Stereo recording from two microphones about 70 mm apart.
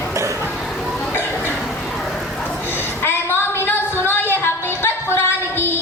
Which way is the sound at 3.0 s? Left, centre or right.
Left.